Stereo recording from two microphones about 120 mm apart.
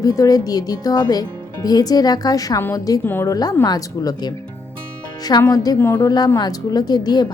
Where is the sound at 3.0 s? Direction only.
15° left (ahead or behind).